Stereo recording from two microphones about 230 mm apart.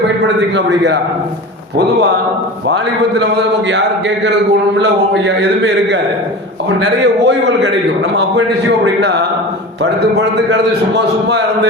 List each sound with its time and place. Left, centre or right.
0.3 s a man's voice: right
4.2 s a man's voice: right
6.7 s a man's voice: right
8.8 s a man's voice: right